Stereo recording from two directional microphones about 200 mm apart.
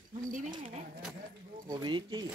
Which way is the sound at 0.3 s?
40° right (ahead or behind).